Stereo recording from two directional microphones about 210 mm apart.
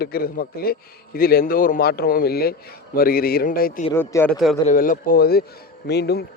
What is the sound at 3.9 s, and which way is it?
Speech, 10° left (ahead or behind).